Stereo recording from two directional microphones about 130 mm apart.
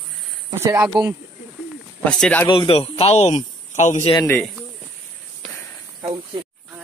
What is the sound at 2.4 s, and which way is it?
Speech, 35° left (ahead or behind).